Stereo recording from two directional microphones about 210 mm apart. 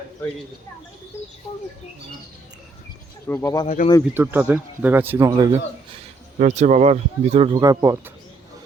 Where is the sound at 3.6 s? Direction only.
35° left (ahead or behind).